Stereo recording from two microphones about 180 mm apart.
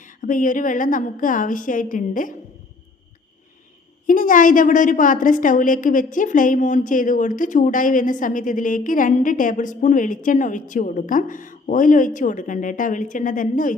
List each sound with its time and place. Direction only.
0.2 s a woman's voice: 45° left (ahead or behind)
4.0 s a woman's voice: 50° left (ahead or behind)